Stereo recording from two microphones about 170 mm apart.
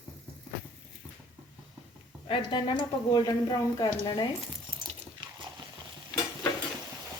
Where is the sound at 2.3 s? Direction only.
30° left (ahead or behind).